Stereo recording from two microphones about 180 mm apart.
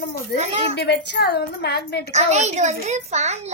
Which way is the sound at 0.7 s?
70° left (ahead or behind).